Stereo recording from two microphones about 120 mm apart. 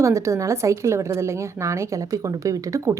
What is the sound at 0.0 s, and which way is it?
A woman's voice, 25° right (ahead or behind).